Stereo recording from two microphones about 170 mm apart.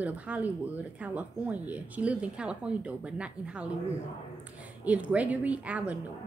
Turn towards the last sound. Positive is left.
turn(degrees=-10)  # may be behind; listen again after turning